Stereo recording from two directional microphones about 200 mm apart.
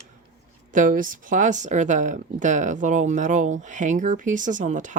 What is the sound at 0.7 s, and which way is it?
Speech, 40° right (ahead or behind).